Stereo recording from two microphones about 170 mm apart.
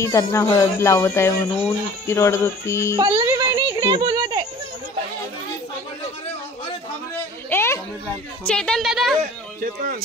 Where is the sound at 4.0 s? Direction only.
20° right (ahead or behind).